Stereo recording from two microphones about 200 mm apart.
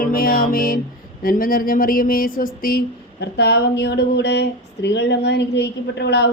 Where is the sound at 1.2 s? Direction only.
45° left (ahead or behind).